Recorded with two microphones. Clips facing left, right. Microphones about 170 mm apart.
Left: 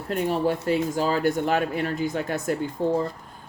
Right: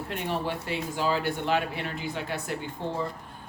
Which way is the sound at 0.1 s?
40° left (ahead or behind).